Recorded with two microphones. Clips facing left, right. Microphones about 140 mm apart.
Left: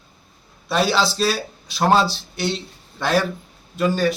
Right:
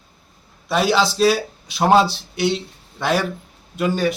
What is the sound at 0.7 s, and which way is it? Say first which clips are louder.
A man's voice: right 2 dB; 10° right (ahead or behind).